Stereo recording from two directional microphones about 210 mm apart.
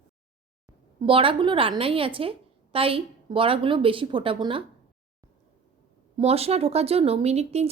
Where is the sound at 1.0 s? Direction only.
25° right (ahead or behind).